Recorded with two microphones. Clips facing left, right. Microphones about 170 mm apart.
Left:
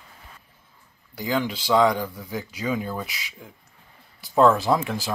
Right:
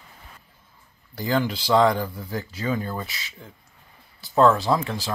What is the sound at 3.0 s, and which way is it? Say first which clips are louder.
Speech: left 1 dB; 15° left (ahead or behind).